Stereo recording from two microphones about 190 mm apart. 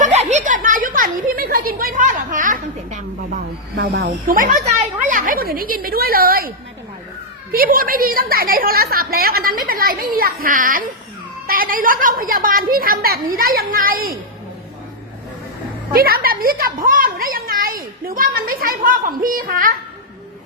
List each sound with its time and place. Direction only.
0.0 s a sound: 35° right (ahead or behind)
3.8 s speech: 55° right (ahead or behind)
7.5 s a woman's voice: 50° right (ahead or behind)
15.9 s a woman's voice: 50° right (ahead or behind)